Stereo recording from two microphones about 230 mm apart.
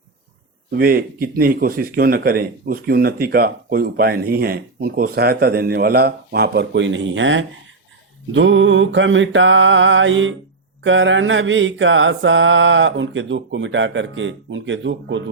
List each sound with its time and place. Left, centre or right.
0.8 s speech: right
8.3 s mantra: right